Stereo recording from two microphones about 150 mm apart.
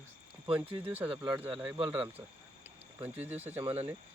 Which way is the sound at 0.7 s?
40° right (ahead or behind).